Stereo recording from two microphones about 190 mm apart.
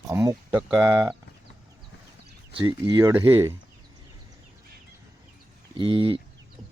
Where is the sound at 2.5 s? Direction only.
20° right (ahead or behind).